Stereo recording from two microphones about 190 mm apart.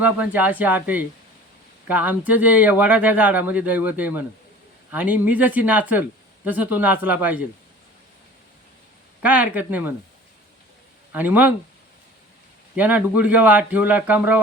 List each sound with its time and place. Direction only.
0.0 s speech: 10° right (ahead or behind)
9.2 s speech: 10° right (ahead or behind)
11.1 s speech: 10° right (ahead or behind)
12.7 s speech: 10° right (ahead or behind)